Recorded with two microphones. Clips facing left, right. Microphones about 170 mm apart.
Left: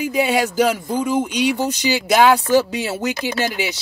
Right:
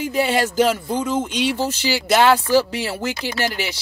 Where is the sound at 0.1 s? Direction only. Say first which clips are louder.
Even; 15° left (ahead or behind).